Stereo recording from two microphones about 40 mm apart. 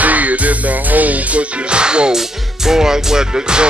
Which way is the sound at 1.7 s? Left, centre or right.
Right.